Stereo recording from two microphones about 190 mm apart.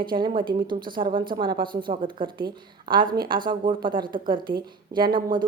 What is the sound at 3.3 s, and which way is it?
A woman's voice, 25° right (ahead or behind).